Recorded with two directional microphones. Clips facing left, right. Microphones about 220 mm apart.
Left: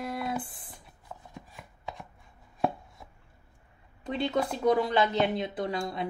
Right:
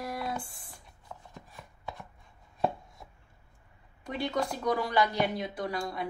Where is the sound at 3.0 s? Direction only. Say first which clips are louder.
Even; centre (ahead or behind).